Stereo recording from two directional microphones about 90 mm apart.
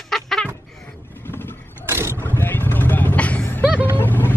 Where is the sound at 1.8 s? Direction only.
30° right (ahead or behind).